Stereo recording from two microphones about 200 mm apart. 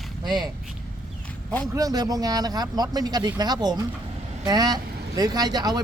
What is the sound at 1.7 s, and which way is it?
Speech, 20° right (ahead or behind).